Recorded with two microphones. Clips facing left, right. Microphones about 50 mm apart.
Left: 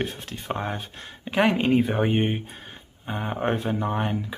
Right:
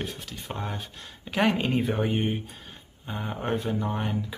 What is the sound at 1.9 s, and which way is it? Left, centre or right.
Speech, left.